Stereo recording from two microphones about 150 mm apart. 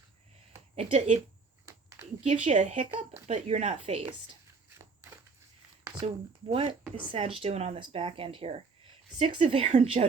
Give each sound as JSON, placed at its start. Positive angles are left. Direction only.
{"t": 0.8, "sound": "speech", "side_deg": -45}
{"t": 2.2, "sound": "speech", "side_deg": -50}
{"t": 6.5, "sound": "speech", "side_deg": -40}